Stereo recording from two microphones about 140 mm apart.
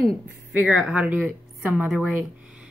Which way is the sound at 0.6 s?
10° right (ahead or behind).